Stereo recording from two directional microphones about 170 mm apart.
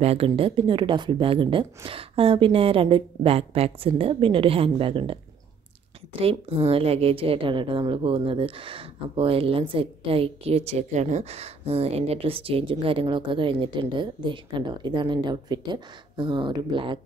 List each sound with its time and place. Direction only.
0.0 s a woman's voice: 35° right (ahead or behind)
6.2 s a woman's voice: 35° right (ahead or behind)